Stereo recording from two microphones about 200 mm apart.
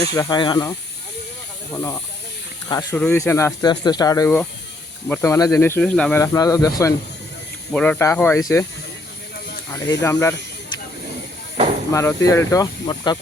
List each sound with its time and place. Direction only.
0.1 s speech: 20° left (ahead or behind)
7.7 s speech: 5° left (ahead or behind)
9.7 s speech: 15° left (ahead or behind)
11.9 s speech: 15° left (ahead or behind)